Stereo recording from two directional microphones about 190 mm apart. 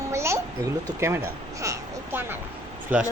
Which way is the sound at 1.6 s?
15° right (ahead or behind).